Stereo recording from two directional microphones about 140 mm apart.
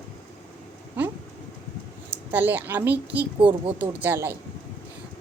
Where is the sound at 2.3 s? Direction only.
15° right (ahead or behind).